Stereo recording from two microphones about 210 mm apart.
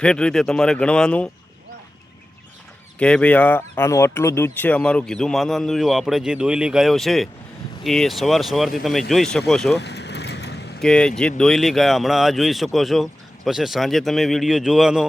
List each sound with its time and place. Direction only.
0.0 s speech: 5° left (ahead or behind)
3.0 s speech: 5° left (ahead or behind)
9.7 s vehicle: 55° left (ahead or behind)
10.8 s speech: 5° left (ahead or behind)